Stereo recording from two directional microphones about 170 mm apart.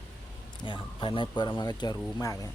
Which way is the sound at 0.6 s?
30° left (ahead or behind).